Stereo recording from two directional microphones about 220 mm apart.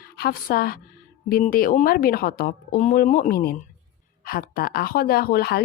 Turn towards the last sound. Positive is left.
turn(degrees=45)  # may be behind; listen again after turning